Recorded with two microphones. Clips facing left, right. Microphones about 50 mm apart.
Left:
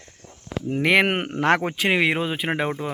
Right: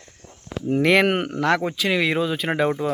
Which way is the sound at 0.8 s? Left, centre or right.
Centre.